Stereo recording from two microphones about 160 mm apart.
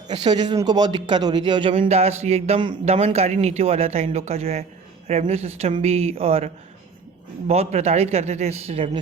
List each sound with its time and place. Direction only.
0.1 s speech: 25° right (ahead or behind)